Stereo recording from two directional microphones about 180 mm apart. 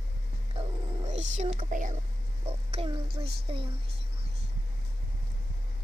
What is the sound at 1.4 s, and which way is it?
Speech, 45° right (ahead or behind).